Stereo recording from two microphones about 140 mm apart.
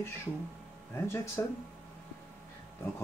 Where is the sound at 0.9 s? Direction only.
20° left (ahead or behind).